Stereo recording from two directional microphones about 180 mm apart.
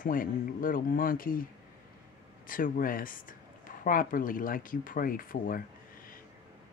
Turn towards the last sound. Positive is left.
turn(degrees=50)  # may be behind; listen again after turning